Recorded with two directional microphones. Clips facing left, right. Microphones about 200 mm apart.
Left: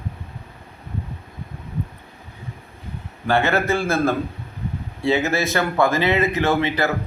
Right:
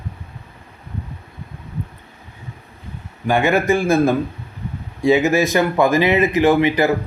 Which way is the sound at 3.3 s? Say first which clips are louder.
Right 3 dB; 15° right (ahead or behind).